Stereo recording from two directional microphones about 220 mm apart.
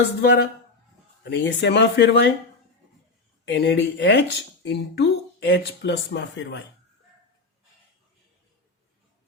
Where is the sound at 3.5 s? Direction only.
55° left (ahead or behind).